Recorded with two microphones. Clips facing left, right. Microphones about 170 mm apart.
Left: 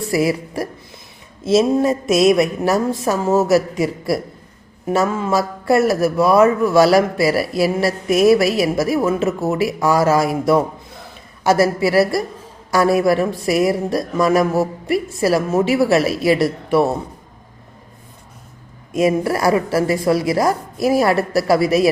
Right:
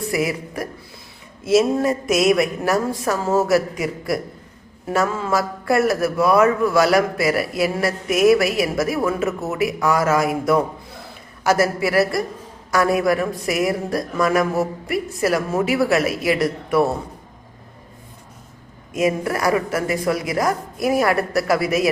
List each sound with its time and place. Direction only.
0.1 s a woman's voice: 30° left (ahead or behind)
1.7 s speech: 20° left (ahead or behind)
18.9 s speech: 30° left (ahead or behind)